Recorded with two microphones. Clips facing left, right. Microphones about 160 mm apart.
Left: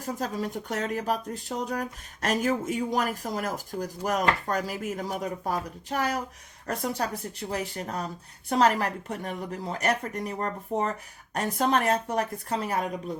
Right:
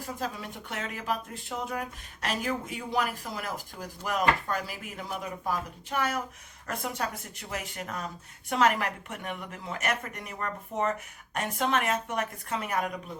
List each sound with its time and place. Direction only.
0.0 s speech: 40° left (ahead or behind)